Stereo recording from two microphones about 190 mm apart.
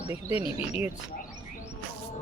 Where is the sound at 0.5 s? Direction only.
10° right (ahead or behind).